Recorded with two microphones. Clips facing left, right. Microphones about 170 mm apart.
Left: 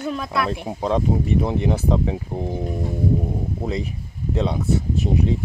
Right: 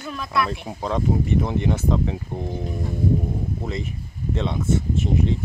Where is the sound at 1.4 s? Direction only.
35° left (ahead or behind).